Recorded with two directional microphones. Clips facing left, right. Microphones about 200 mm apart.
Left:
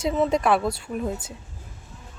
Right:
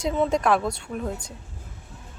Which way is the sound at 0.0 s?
5° left (ahead or behind).